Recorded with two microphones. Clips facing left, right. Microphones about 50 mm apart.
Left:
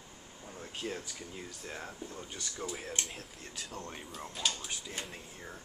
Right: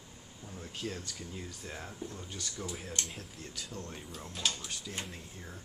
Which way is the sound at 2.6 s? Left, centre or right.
Centre.